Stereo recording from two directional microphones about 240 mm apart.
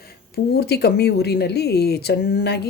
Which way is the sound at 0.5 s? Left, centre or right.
Left.